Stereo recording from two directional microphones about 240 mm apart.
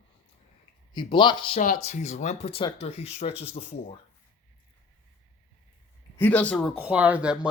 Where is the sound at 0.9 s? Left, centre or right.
Centre.